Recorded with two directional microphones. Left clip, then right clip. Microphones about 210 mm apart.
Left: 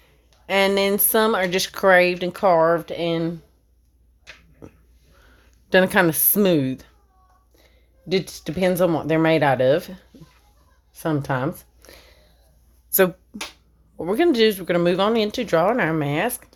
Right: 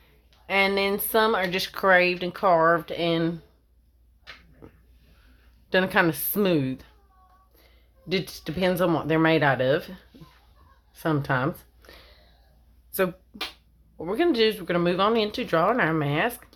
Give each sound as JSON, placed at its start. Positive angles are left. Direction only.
{"t": 0.0, "sound": "speech", "side_deg": 40}
{"t": 5.6, "sound": "speech", "side_deg": 35}
{"t": 8.1, "sound": "speech", "side_deg": 25}
{"t": 12.9, "sound": "speech", "side_deg": 40}